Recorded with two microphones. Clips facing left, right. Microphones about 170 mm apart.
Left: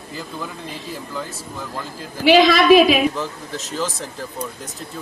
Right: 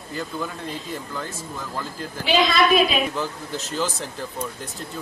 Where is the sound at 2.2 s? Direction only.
80° left.